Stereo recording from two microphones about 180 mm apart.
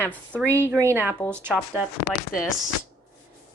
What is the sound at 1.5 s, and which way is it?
Speech, centre (ahead or behind).